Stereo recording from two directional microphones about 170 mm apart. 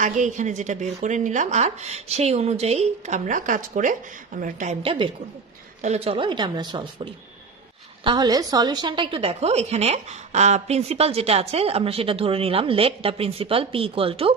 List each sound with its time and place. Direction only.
0.0 s a woman's voice: 45° right (ahead or behind)
4.8 s a woman's voice: 30° right (ahead or behind)
5.8 s a woman's voice: 40° right (ahead or behind)